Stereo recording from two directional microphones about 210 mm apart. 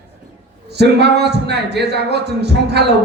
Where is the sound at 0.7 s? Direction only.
50° right (ahead or behind).